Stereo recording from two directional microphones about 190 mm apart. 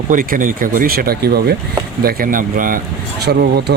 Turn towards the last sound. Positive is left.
turn(degrees=-60)  # may be behind; listen again after turning